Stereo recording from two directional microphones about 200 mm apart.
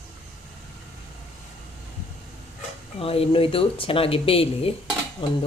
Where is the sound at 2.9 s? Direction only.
30° left (ahead or behind).